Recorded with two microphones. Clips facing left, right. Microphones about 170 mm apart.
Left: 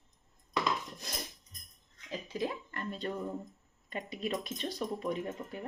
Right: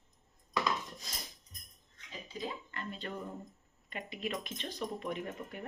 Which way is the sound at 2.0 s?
80° left.